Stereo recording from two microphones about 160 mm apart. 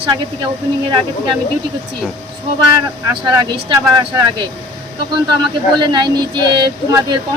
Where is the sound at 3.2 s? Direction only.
30° right (ahead or behind).